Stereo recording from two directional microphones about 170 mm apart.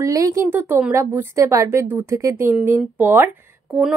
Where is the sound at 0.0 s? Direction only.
20° right (ahead or behind).